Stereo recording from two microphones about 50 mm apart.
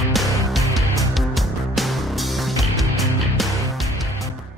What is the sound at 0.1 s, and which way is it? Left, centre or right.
Music, centre.